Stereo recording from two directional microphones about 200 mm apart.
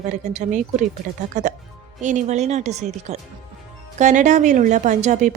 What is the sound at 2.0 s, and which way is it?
A woman's voice, 35° right (ahead or behind).